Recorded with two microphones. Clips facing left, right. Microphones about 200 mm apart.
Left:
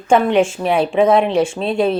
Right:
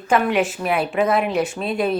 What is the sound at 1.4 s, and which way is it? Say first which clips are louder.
Speech: left 5 dB; 25° left (ahead or behind).